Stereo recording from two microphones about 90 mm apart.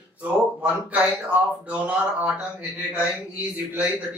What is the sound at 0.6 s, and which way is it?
Speech, 15° right (ahead or behind).